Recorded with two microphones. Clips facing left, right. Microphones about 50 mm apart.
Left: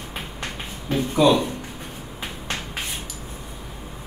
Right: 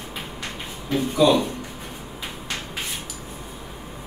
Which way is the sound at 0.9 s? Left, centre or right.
Left.